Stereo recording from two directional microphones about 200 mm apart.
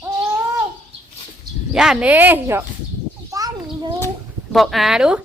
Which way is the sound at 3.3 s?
15° right (ahead or behind).